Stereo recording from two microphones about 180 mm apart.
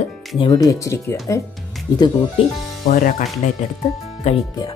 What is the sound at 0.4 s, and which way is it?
Speech, 25° left (ahead or behind).